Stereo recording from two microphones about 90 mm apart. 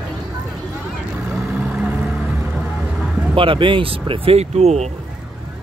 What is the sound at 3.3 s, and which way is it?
Speech, 75° right (ahead or behind).